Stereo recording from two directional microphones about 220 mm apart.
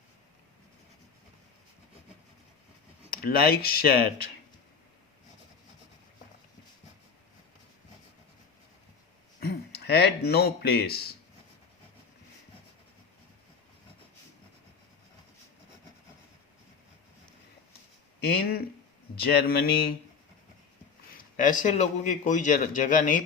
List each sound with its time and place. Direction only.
3.1 s speech: 45° left (ahead or behind)
9.4 s speech: 45° left (ahead or behind)
18.2 s a sound: 45° left (ahead or behind)
19.2 s speech: 45° left (ahead or behind)
21.3 s a man's voice: 35° left (ahead or behind)